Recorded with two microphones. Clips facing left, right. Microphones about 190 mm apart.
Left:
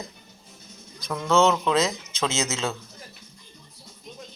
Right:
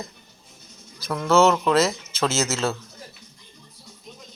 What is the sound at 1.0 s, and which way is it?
Speech, 5° right (ahead or behind).